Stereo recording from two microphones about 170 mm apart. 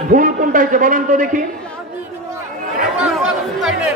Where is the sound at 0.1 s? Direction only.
50° right (ahead or behind).